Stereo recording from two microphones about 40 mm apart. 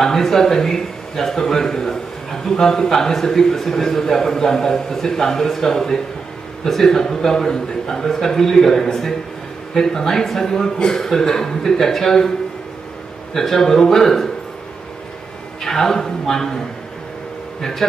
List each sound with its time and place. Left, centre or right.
0.0 s a man's voice: centre
13.3 s a man's voice: centre
15.6 s speech: centre
17.6 s speech: centre